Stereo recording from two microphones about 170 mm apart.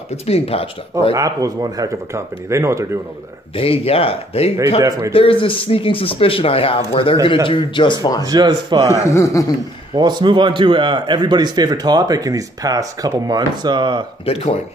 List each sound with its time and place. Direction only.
0.1 s speech: 35° left (ahead or behind)
1.1 s speech: 20° right (ahead or behind)
3.5 s a man's voice: 35° left (ahead or behind)
8.2 s a man's voice: 25° right (ahead or behind)
9.0 s speech: 15° left (ahead or behind)
9.9 s a man's voice: 25° right (ahead or behind)
14.2 s speech: 35° left (ahead or behind)